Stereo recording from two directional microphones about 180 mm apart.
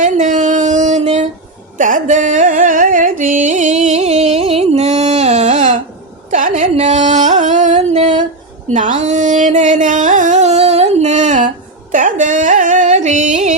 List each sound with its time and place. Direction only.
0.0 s a sound: 45° right (ahead or behind)
1.8 s carnatic music: 45° right (ahead or behind)
6.3 s music: 45° right (ahead or behind)